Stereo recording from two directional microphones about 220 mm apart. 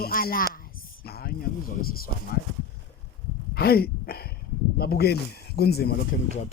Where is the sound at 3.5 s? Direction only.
45° left (ahead or behind).